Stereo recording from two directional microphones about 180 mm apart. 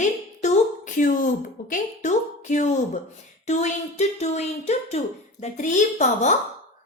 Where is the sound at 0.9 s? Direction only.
45° left (ahead or behind).